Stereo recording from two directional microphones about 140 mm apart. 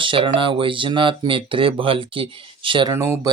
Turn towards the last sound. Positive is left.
turn(degrees=-25)  # may be behind; listen again after turning